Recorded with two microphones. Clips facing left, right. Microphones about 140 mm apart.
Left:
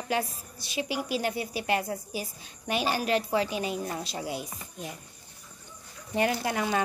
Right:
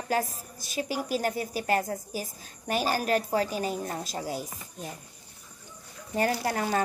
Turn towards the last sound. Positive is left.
turn(degrees=-40)  # may be behind; listen again after turning